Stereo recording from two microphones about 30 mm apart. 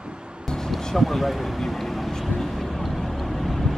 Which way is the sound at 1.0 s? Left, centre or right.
Centre.